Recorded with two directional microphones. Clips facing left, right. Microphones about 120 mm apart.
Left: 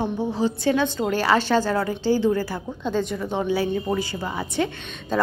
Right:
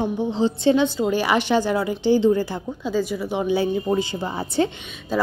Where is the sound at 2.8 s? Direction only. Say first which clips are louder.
Right 1 dB; 5° right (ahead or behind); by 4.7 s 30° right (ahead or behind).